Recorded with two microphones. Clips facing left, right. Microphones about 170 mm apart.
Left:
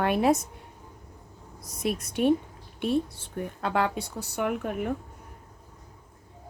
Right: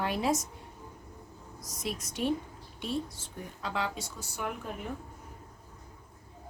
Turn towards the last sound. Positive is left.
turn(degrees=60)  # may be behind; listen again after turning